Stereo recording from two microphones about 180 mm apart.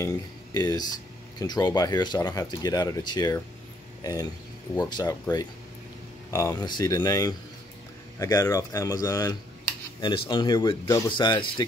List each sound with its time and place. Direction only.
0.0 s speech: 20° left (ahead or behind)
6.3 s speech: 20° left (ahead or behind)